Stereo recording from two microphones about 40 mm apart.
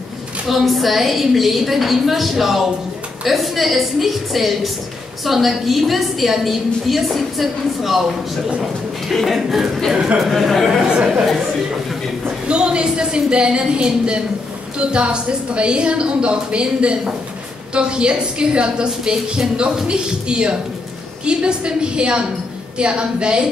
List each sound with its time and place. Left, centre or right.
0.5 s a woman's voice: centre
9.1 s a woman's voice: centre
12.4 s a woman's voice: right